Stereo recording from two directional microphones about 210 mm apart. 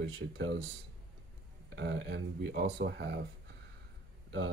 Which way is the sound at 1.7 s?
55° right (ahead or behind).